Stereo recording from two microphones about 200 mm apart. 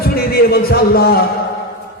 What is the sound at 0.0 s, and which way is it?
A man's voice, 50° left (ahead or behind).